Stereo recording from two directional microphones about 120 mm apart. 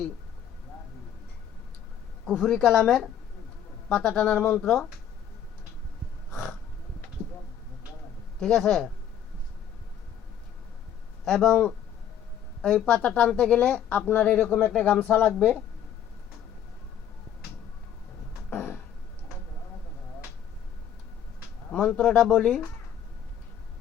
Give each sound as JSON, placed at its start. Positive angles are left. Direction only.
{"t": 2.2, "sound": "speech", "side_deg": 5}
{"t": 6.3, "sound": "snort", "side_deg": 5}
{"t": 8.4, "sound": "speech", "side_deg": 5}
{"t": 11.3, "sound": "speech", "side_deg": 5}
{"t": 18.5, "sound": "a sound", "side_deg": 20}
{"t": 21.7, "sound": "speech", "side_deg": 10}